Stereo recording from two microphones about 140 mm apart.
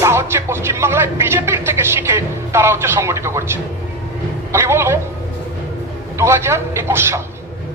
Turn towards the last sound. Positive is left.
turn(degrees=-20)  # may be behind; listen again after turning